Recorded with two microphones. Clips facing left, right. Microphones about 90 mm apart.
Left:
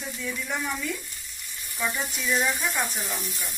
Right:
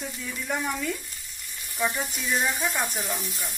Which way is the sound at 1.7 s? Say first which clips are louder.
Right 2 dB; 30° right (ahead or behind).